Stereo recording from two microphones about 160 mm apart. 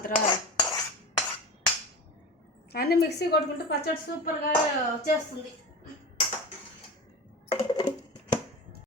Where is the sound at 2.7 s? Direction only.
80° left.